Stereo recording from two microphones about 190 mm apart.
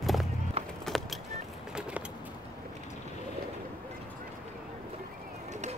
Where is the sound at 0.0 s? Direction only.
Centre (ahead or behind).